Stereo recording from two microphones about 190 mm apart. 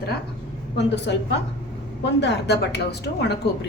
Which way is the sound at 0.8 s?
65° left (ahead or behind).